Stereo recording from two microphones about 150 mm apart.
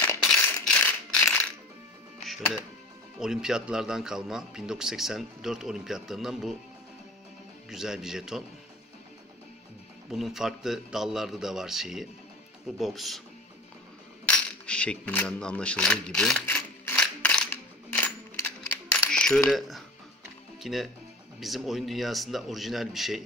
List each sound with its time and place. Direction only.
0.0 s a sound: 15° left (ahead or behind)
0.7 s rattle: 10° left (ahead or behind)
2.2 s music: centre (ahead or behind)
3.2 s a man's voice: 5° right (ahead or behind)
7.7 s a man's voice: 5° right (ahead or behind)
10.1 s a man's voice: centre (ahead or behind)
14.2 s coin: 10° left (ahead or behind)
16.4 s a sound: 10° left (ahead or behind)
20.6 s a man's voice: centre (ahead or behind)